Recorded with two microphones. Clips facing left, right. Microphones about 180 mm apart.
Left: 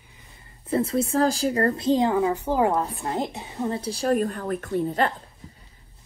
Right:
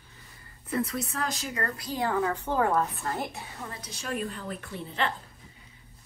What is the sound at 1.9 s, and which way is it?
A woman's voice, 20° left (ahead or behind).